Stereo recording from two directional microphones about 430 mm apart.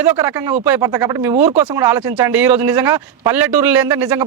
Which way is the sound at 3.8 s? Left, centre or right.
Centre.